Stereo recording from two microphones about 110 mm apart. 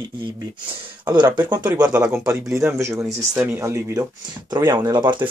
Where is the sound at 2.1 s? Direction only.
25° right (ahead or behind).